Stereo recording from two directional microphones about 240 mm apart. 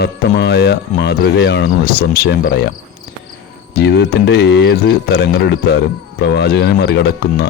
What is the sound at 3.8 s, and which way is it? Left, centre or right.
Speech, left.